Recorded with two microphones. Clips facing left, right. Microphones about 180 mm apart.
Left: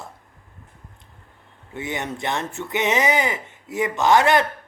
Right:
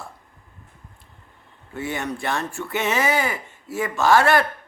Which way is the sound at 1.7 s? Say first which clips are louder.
Right 1 dB; 20° left (ahead or behind).